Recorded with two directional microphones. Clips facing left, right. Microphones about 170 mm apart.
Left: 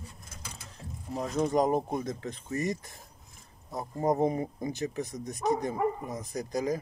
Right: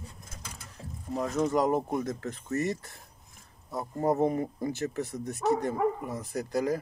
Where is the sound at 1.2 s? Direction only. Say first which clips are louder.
Even; 15° left (ahead or behind).